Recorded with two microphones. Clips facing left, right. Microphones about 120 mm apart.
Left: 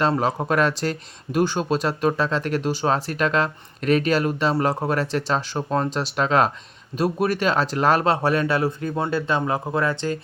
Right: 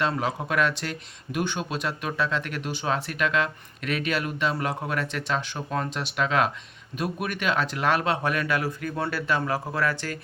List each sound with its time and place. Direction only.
0.0 s speech: 35° left (ahead or behind)